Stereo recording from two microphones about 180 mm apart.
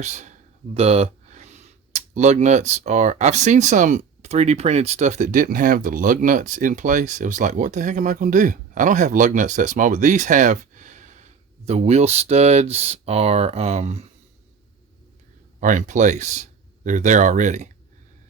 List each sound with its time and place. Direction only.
0.0 s speech: 40° right (ahead or behind)
15.6 s speech: 45° right (ahead or behind)